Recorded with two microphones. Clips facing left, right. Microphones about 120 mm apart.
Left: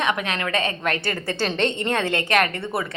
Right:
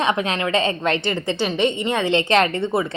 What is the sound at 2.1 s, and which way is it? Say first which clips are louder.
Speech: right 4 dB; 25° right (ahead or behind).